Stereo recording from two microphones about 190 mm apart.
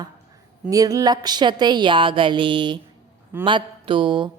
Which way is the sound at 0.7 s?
20° right (ahead or behind).